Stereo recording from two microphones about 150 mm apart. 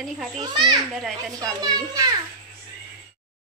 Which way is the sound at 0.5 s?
30° right (ahead or behind).